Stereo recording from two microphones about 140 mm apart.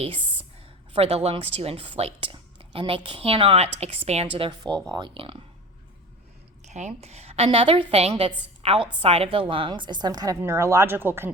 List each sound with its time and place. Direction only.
0.0 s a sound: 40° right (ahead or behind)
0.9 s speech: 45° right (ahead or behind)
4.6 s a woman's voice: 30° right (ahead or behind)
6.7 s a woman's voice: 55° right (ahead or behind); by 11.3 s 15° right (ahead or behind)